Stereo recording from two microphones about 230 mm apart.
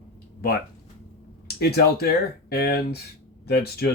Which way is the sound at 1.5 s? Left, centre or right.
Left.